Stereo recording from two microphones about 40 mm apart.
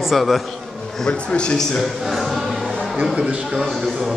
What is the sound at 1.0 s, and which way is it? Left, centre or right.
Speech, left.